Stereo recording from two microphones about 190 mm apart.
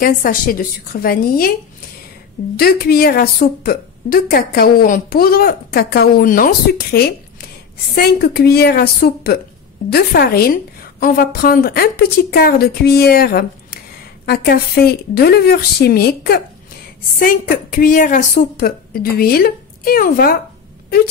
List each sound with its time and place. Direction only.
0.0 s a woman's voice: 45° left (ahead or behind)
2.5 s a woman's voice: 50° left (ahead or behind)